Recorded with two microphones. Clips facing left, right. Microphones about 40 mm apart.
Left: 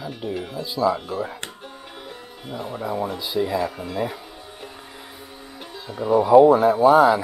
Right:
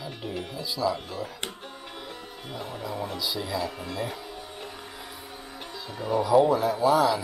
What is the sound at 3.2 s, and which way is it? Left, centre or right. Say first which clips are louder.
Speech: left 6 dB; left.